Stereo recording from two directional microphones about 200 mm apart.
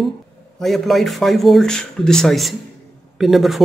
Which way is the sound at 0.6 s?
Centre (ahead or behind).